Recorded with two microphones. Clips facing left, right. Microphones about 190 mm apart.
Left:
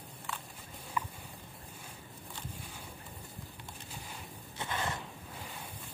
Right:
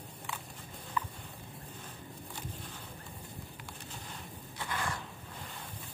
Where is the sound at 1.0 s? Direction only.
10° left (ahead or behind).